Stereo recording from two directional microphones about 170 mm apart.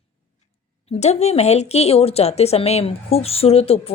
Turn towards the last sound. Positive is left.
turn(degrees=35)  # may be behind; listen again after turning